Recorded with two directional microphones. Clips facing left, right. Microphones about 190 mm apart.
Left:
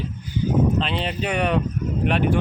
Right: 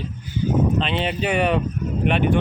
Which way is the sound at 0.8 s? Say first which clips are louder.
Right 2 dB; centre (ahead or behind).